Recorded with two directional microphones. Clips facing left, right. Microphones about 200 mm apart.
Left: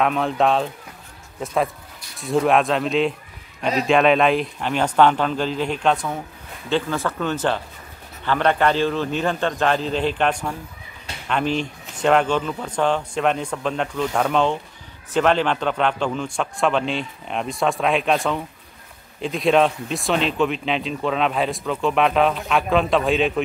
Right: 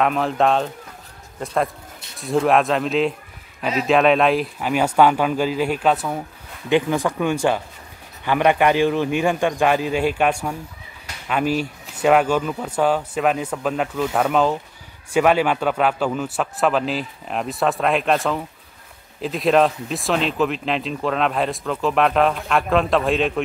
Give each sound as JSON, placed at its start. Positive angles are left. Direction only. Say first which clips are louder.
{"t": 0.0, "sound": "speech", "louder": "right 1 dB", "side_deg": 0}